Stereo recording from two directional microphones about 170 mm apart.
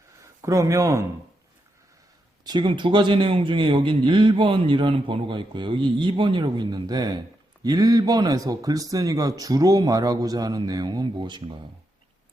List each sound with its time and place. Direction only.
0.2 s speech: 20° right (ahead or behind)
2.4 s a man's voice: 25° right (ahead or behind)